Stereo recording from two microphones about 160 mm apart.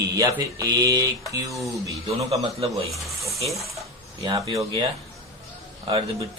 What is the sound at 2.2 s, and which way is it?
Speech, 40° right (ahead or behind).